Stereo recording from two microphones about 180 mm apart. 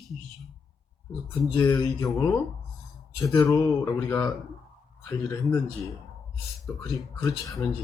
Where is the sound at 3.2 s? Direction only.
15° left (ahead or behind).